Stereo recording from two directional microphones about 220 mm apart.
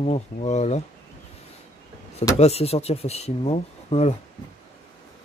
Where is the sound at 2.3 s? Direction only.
30° left (ahead or behind).